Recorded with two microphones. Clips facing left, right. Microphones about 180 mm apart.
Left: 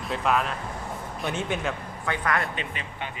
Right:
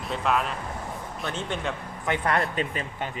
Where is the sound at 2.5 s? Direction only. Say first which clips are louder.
Right 5 dB; 40° right (ahead or behind).